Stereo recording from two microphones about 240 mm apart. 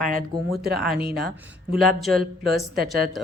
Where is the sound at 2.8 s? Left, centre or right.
Right.